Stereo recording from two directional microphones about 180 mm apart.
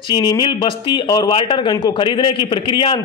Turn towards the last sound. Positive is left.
turn(degrees=25)  # may be behind; listen again after turning